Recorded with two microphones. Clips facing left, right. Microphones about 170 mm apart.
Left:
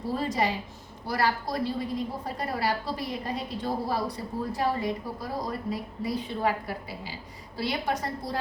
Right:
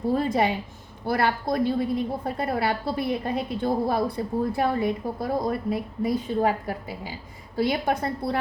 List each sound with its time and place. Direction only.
0.1 s a woman's voice: 55° right (ahead or behind)